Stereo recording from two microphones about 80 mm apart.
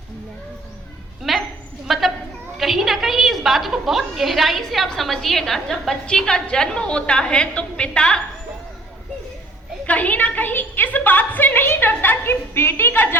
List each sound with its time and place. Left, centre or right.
1.2 s a sound: centre
2.6 s a woman's voice: centre
9.8 s a woman's voice: centre